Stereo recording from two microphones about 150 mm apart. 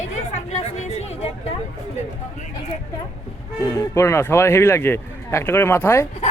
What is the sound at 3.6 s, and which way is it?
Speech, 20° left (ahead or behind).